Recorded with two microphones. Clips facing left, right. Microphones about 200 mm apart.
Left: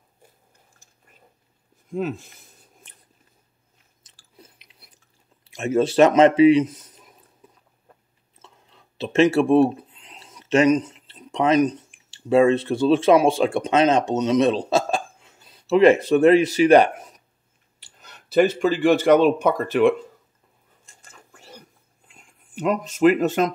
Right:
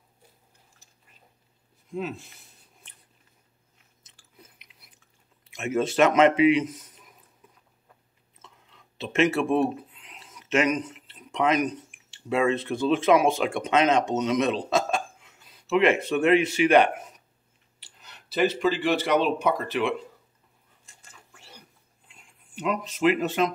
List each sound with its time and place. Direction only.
1.9 s speech: 45° left (ahead or behind)
4.0 s chewing: 35° left (ahead or behind)
8.4 s speech: 35° left (ahead or behind)
20.8 s whispering: 45° left (ahead or behind)